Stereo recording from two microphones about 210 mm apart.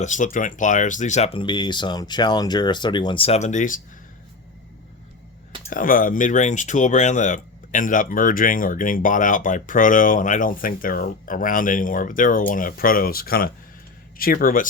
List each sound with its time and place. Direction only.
0.0 s speech: 35° left (ahead or behind)
5.7 s speech: 40° left (ahead or behind)